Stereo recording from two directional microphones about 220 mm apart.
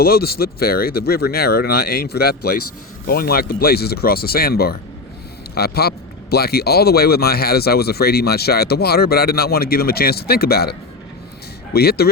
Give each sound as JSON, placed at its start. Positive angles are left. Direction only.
{"t": 0.0, "sound": "speech", "side_deg": 45}